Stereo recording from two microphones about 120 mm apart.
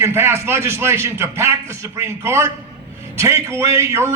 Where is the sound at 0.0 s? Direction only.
20° right (ahead or behind).